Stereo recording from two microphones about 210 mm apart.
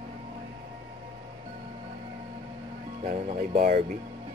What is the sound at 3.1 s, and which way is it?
Speech, 35° right (ahead or behind).